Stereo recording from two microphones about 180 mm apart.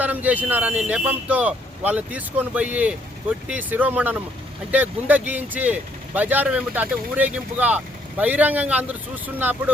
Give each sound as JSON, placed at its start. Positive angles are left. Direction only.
{"t": 0.0, "sound": "speech", "side_deg": -10}